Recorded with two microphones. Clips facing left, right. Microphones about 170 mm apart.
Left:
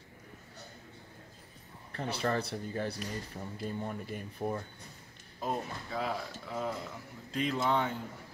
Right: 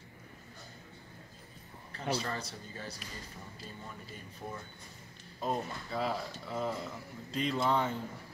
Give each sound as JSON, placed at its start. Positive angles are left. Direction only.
{"t": 1.9, "sound": "speech", "side_deg": 55}
{"t": 5.4, "sound": "speech", "side_deg": 0}